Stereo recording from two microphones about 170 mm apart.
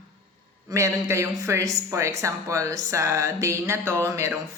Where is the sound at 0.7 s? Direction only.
15° right (ahead or behind).